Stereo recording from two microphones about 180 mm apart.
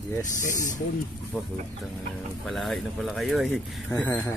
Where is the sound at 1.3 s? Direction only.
5° right (ahead or behind).